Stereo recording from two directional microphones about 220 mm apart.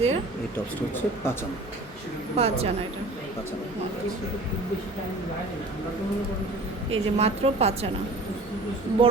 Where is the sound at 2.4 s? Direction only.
25° right (ahead or behind).